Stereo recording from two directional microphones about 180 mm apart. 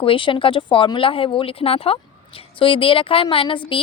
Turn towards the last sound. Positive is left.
turn(degrees=30)  # may be behind; listen again after turning